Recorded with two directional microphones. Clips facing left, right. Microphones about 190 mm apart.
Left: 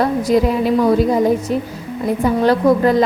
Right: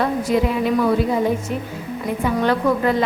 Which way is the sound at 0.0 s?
40° left (ahead or behind).